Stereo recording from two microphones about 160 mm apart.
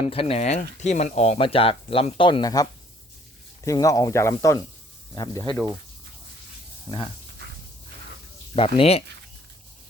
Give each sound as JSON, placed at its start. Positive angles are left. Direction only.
{"t": 0.0, "sound": "speech", "side_deg": 35}
{"t": 8.5, "sound": "speech", "side_deg": 35}